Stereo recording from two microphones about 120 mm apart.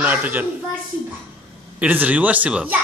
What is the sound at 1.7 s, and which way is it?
Speech, 15° right (ahead or behind).